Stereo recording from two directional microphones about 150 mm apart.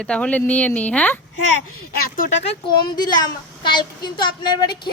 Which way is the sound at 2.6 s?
30° left (ahead or behind).